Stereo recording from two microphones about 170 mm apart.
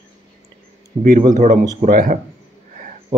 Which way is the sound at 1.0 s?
50° right (ahead or behind).